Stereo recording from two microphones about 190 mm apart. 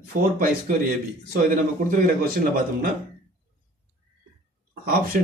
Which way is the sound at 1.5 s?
50° right (ahead or behind).